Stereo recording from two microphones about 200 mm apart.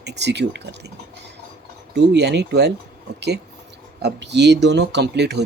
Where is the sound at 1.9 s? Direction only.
55° right (ahead or behind).